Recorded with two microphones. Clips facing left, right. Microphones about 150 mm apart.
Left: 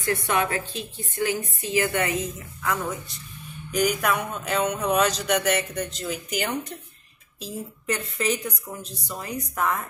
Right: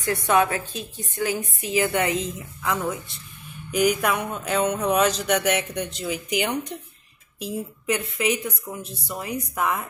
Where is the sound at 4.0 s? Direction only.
5° right (ahead or behind).